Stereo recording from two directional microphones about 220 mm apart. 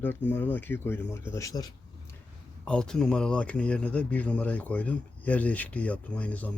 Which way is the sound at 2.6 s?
5° left (ahead or behind).